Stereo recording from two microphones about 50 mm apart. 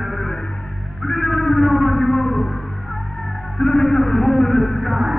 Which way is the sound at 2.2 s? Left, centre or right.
Left.